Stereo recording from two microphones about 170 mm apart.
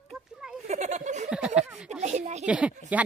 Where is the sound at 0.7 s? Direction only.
40° right (ahead or behind).